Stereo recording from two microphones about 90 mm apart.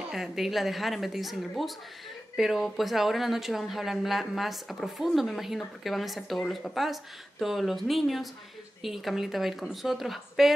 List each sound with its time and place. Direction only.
0.1 s speech: centre (ahead or behind)